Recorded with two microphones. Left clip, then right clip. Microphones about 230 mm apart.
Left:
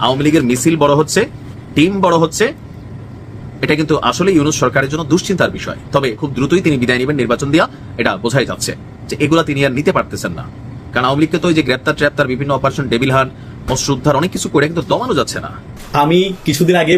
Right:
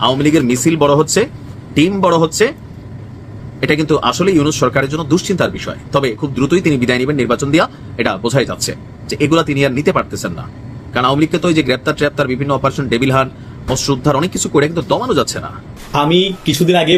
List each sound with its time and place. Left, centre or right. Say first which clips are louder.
0.0 s speech: even; centre
3.6 s speech: even; centre
16.0 s speech: even; left